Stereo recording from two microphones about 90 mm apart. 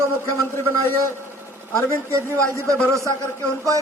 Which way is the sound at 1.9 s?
30° right (ahead or behind).